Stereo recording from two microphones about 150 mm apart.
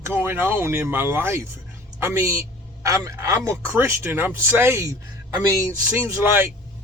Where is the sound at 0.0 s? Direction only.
15° right (ahead or behind).